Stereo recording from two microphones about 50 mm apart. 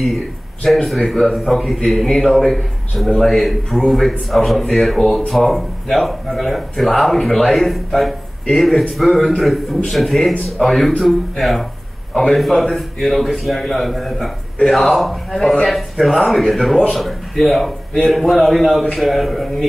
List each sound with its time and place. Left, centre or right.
0.8 s a man's voice: centre